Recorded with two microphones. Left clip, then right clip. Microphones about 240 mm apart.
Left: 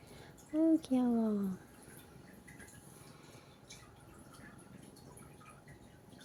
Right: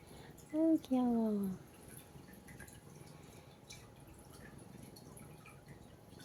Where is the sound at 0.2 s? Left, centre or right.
Centre.